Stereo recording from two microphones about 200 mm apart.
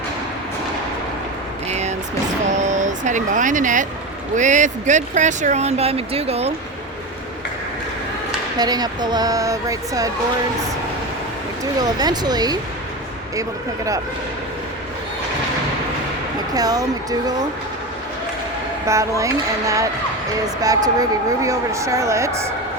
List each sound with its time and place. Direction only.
1.7 s a sound: 35° right (ahead or behind)
2.5 s vehicle: 35° right (ahead or behind)
4.4 s speech: 40° right (ahead or behind)
8.5 s speech: 20° right (ahead or behind)
11.6 s speech: 20° right (ahead or behind)
16.6 s speech: 20° right (ahead or behind)
18.9 s speech: 15° right (ahead or behind)